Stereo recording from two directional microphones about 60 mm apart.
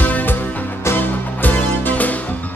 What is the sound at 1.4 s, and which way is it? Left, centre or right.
Music, left.